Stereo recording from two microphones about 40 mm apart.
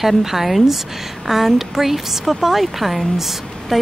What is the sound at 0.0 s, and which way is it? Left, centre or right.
A woman's voice, centre.